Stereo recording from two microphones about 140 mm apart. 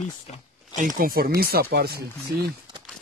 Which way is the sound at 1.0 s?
90° right.